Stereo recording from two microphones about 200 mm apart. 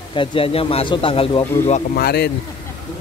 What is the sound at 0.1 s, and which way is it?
Speech, 25° left (ahead or behind).